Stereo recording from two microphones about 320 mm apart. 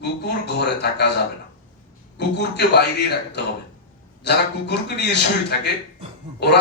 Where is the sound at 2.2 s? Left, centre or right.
Left.